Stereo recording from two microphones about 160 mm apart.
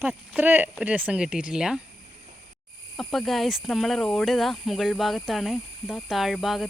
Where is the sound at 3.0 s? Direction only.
Centre (ahead or behind).